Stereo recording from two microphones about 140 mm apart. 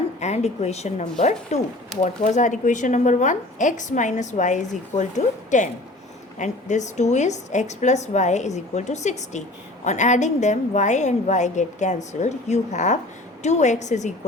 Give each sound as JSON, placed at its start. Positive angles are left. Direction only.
{"t": 0.2, "sound": "speech", "side_deg": 50}